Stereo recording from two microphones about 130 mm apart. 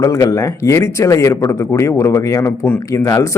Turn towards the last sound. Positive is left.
turn(degrees=25)  # may be behind; listen again after turning